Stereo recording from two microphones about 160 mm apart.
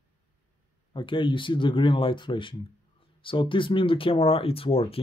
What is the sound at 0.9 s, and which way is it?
Speech, 30° left (ahead or behind).